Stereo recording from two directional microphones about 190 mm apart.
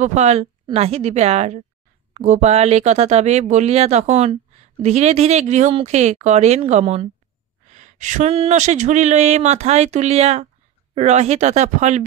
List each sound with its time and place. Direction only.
0.0 s speech: 35° right (ahead or behind)